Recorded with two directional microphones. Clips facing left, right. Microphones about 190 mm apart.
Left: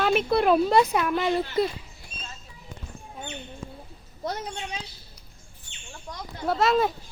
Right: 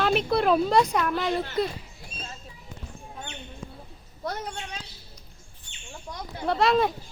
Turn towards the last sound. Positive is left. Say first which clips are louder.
# even
turn(degrees=0)  # may be behind; listen again after turning